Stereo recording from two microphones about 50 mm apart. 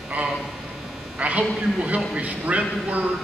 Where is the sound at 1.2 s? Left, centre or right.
Right.